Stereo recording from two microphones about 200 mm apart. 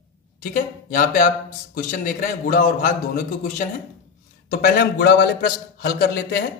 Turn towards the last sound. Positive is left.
turn(degrees=50)  # may be behind; listen again after turning